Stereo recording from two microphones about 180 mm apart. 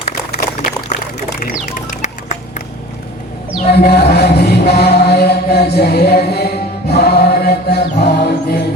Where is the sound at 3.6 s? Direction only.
60° left (ahead or behind).